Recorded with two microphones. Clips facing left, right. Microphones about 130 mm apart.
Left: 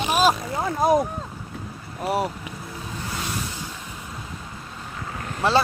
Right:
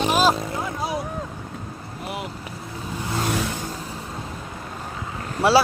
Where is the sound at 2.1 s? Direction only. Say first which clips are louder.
Left 8 dB; 40° left (ahead or behind).